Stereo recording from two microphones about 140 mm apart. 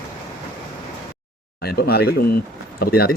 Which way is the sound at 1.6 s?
90° left.